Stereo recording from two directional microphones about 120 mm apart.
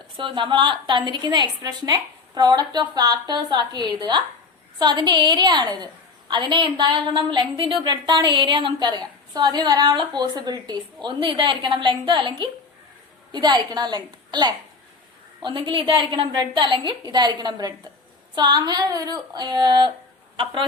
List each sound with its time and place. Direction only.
0.2 s a woman's voice: 45° right (ahead or behind)
13.3 s a woman's voice: 35° right (ahead or behind)